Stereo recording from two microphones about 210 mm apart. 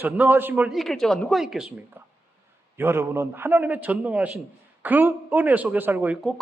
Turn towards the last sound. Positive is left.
turn(degrees=-5)  # may be behind; listen again after turning